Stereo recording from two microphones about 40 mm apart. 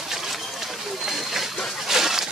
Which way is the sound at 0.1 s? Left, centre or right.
Centre.